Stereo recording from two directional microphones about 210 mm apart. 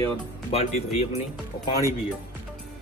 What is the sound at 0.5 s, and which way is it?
Speech, 30° left (ahead or behind).